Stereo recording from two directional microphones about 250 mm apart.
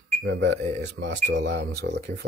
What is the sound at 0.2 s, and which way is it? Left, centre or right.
Speech, right.